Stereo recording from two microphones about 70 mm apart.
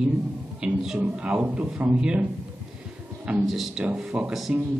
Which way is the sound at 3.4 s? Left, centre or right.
Centre.